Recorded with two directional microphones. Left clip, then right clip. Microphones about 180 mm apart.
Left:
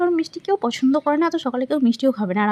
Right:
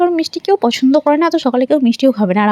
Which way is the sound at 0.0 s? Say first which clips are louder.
Right 6 dB; 25° right (ahead or behind).